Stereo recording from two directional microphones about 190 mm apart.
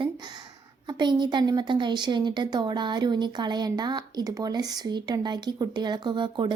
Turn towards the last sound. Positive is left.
turn(degrees=-25)  # may be behind; listen again after turning